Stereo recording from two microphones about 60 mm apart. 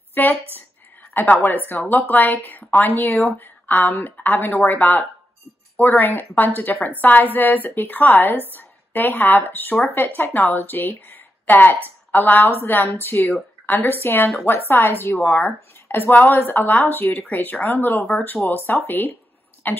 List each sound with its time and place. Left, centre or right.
0.1 s a woman's voice: left
1.9 s a woman's voice: left